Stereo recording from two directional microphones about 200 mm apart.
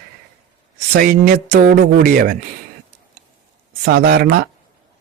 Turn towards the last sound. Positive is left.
turn(degrees=-50)  # may be behind; listen again after turning